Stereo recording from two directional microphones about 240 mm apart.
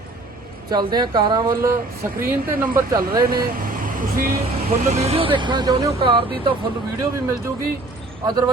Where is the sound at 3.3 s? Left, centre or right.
Right; by 6.2 s centre.